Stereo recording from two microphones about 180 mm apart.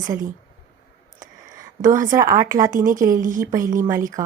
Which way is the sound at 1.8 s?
45° right (ahead or behind).